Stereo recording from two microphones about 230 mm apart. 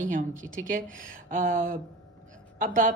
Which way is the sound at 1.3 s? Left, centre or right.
Right.